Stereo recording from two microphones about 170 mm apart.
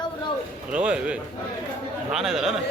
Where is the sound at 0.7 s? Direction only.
5° right (ahead or behind).